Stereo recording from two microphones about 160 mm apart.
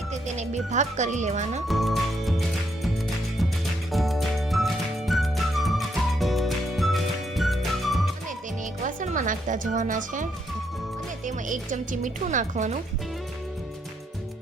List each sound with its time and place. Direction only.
0.3 s speech: 45° right (ahead or behind)
1.6 s speech: centre (ahead or behind)
3.9 s music: centre (ahead or behind)
8.8 s speech: 55° right (ahead or behind)
11.3 s speech: 55° right (ahead or behind)